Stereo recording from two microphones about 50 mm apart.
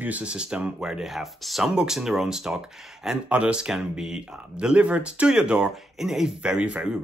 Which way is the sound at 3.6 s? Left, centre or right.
Centre.